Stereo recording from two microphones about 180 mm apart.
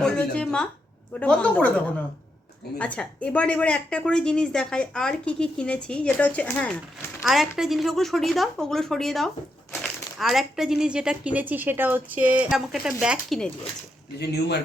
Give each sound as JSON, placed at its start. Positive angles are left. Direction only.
{"t": 0.0, "sound": "a woman's voice", "side_deg": 5}
{"t": 14.2, "sound": "speech", "side_deg": 70}